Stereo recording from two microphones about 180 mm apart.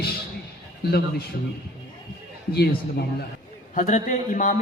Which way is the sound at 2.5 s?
65° left (ahead or behind).